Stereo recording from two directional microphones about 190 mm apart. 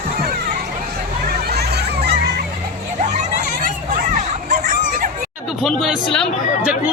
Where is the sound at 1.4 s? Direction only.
60° right (ahead or behind).